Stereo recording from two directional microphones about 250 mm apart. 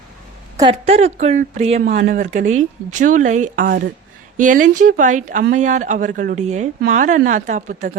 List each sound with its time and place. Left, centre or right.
0.5 s speech: centre